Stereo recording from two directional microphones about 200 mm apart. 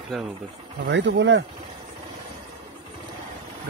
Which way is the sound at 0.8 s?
65° right (ahead or behind).